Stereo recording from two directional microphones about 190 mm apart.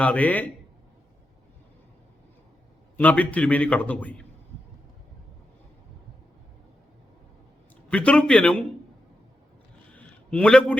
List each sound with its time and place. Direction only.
0.0 s a man's voice: 5° left (ahead or behind)
3.0 s a man's voice: 5° left (ahead or behind)
7.9 s a man's voice: 5° left (ahead or behind)
9.9 s a sound: 5° left (ahead or behind)